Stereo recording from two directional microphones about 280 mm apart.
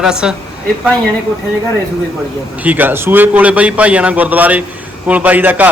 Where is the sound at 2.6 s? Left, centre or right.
Centre.